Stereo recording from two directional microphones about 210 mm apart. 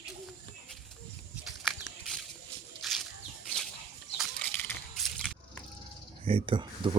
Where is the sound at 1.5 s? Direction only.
Centre (ahead or behind).